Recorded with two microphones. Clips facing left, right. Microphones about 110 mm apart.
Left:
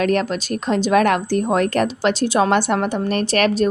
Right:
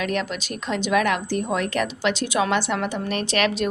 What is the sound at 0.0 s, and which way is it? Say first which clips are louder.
A woman's voice: left 7 dB; 45° left (ahead or behind).